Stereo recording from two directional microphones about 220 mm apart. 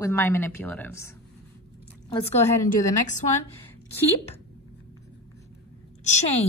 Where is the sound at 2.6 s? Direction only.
35° left (ahead or behind).